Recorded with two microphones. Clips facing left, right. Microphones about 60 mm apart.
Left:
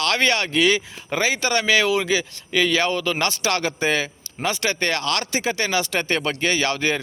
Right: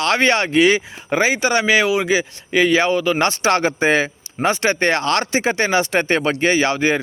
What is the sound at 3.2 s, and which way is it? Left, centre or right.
Speech, right.